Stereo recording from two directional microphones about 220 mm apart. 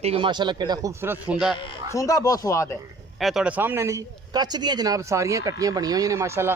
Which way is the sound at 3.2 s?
Centre (ahead or behind).